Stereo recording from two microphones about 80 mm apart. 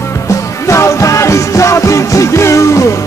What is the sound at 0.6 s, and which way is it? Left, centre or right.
Music, left.